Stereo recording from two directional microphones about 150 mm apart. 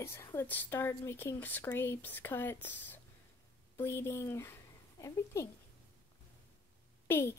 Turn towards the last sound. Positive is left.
turn(degrees=15)  # may be behind; listen again after turning